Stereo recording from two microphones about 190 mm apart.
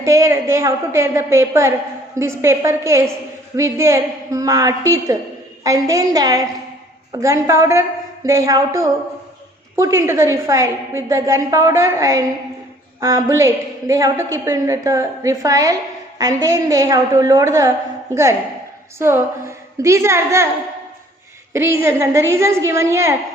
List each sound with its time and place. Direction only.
0.0 s a woman's voice: 15° right (ahead or behind)
21.5 s a woman's voice: 15° right (ahead or behind)